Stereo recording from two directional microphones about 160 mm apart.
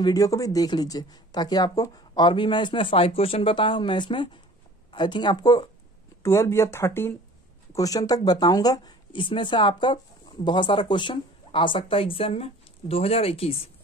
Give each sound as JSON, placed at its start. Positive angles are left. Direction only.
{"t": 0.0, "sound": "speech", "side_deg": 20}